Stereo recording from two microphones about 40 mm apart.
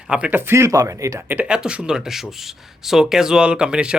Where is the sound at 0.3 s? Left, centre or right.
Right.